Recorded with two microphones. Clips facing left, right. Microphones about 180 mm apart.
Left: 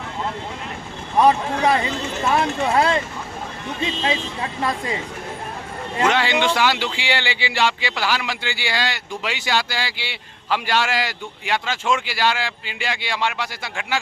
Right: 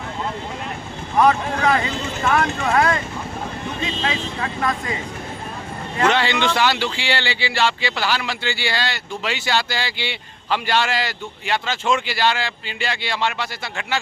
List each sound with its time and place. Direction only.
1.2 s speech: 30° left (ahead or behind)
4.0 s speech: 25° left (ahead or behind)
6.0 s speech: 10° left (ahead or behind)